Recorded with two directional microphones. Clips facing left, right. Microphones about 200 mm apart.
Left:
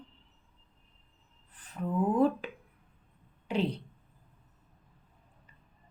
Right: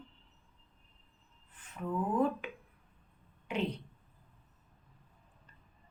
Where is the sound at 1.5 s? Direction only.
35° left (ahead or behind).